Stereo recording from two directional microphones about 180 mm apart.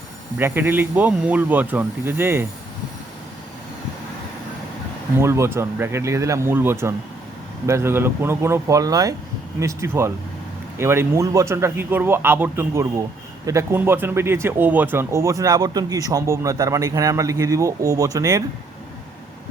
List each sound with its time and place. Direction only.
0.3 s speech: 10° right (ahead or behind)
5.2 s speech: 15° right (ahead or behind)